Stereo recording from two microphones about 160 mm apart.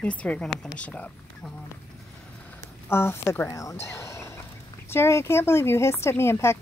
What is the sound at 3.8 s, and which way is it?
Turkey, 15° left (ahead or behind).